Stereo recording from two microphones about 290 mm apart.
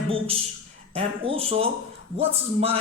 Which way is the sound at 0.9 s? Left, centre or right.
Centre.